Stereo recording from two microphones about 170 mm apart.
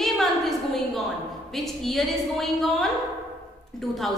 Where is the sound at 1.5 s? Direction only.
Centre (ahead or behind).